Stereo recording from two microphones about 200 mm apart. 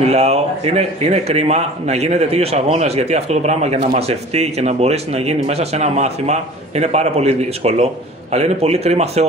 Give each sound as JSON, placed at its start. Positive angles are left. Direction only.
{"t": 0.0, "sound": "a man's voice", "side_deg": -35}